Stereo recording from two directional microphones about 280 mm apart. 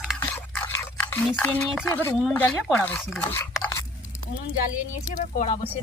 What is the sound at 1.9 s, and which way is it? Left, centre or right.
Speech, centre.